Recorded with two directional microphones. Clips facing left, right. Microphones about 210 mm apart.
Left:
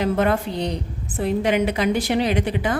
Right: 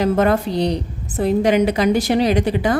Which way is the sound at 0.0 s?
40° right (ahead or behind).